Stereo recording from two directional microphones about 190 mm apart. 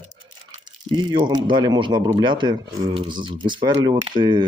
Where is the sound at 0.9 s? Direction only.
25° right (ahead or behind).